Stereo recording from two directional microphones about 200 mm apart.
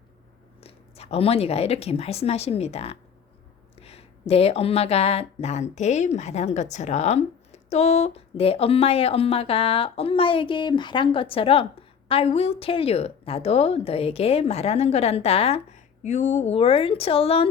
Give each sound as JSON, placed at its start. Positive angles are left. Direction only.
{"t": 0.6, "sound": "speech", "side_deg": 30}